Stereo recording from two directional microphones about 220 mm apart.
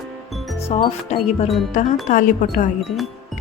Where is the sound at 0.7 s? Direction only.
25° left (ahead or behind).